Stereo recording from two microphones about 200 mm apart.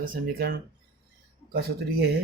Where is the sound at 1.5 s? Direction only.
50° right (ahead or behind).